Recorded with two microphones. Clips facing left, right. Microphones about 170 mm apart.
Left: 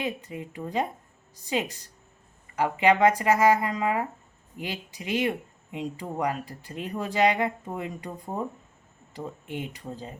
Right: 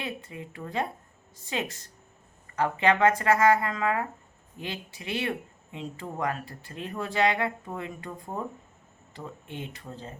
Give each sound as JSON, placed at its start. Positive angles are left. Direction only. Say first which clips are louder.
{"t": 0.0, "sound": "speech", "louder": "left 4 dB", "side_deg": 15}